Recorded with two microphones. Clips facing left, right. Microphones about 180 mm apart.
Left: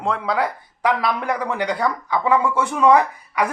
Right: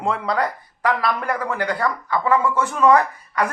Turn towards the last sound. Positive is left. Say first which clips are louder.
# left 1 dB
turn(degrees=15)  # may be behind; listen again after turning